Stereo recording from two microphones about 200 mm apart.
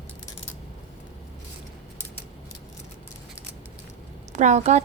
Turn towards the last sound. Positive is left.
turn(degrees=-35)  # may be behind; listen again after turning